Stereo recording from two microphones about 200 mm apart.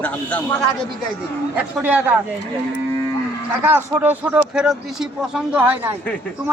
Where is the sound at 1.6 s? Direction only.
5° right (ahead or behind).